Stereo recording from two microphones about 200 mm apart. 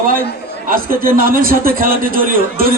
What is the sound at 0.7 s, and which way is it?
A man's voice, 45° right (ahead or behind).